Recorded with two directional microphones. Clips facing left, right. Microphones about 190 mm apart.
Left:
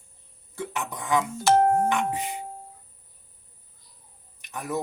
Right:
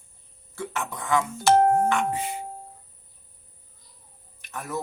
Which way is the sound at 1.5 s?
60° right (ahead or behind).